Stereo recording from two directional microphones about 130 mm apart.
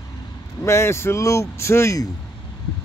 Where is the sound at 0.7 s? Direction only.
20° left (ahead or behind).